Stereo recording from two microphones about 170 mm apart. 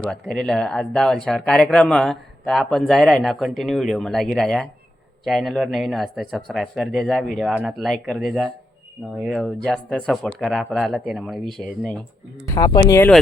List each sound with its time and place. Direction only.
0.0 s speech: 5° left (ahead or behind)
12.5 s speech: 20° left (ahead or behind)